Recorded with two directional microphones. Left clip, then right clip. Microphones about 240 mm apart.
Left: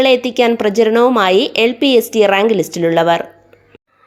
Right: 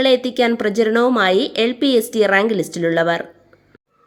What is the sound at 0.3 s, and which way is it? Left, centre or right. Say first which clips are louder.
Speech: left 4 dB; centre.